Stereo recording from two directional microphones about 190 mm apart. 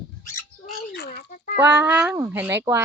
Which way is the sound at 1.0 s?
60° left (ahead or behind).